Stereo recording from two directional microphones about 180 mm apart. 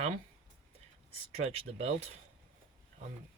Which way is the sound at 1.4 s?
35° right (ahead or behind).